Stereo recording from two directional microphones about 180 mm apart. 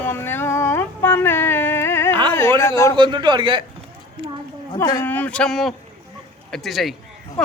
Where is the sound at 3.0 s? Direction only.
25° right (ahead or behind).